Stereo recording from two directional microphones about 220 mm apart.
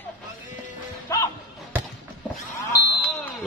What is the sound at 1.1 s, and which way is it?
Slam, 15° left (ahead or behind).